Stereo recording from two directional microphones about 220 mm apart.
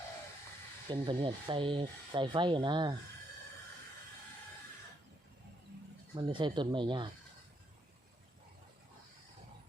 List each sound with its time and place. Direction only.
0.9 s speech: 25° right (ahead or behind)
6.1 s speech: 20° right (ahead or behind)